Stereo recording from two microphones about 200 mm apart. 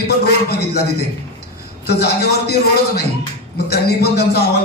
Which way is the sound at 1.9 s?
50° left (ahead or behind).